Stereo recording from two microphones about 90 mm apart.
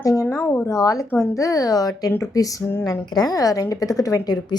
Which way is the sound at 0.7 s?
40° left (ahead or behind).